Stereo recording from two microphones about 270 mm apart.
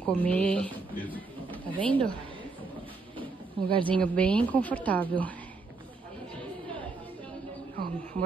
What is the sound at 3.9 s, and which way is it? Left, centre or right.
Speech, centre.